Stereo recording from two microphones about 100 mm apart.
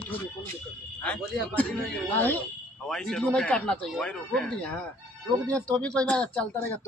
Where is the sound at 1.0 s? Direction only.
10° left (ahead or behind).